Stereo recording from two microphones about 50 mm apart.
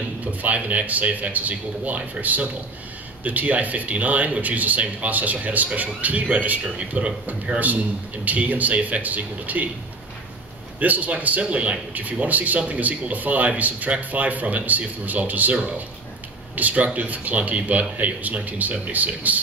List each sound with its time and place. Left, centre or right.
0.2 s speech: right
10.8 s speech: right
16.5 s speech: right